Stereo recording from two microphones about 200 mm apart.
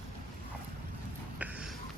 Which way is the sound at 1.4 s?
5° right (ahead or behind).